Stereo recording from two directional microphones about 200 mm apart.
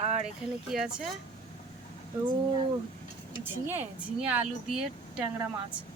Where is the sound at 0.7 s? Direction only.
Centre (ahead or behind).